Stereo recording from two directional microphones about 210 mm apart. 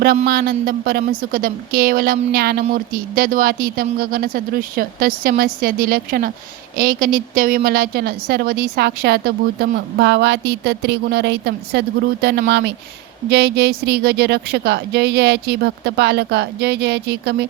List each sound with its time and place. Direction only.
0.3 s a woman's voice: 45° right (ahead or behind)